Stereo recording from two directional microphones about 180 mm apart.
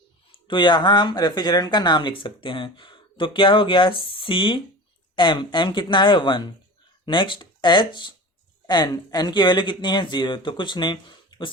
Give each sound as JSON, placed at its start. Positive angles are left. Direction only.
{"t": 0.3, "sound": "speech", "side_deg": 25}